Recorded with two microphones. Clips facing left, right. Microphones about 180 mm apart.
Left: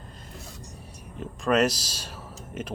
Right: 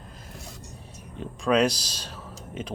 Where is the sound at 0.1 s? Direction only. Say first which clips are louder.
Right 1 dB; centre (ahead or behind).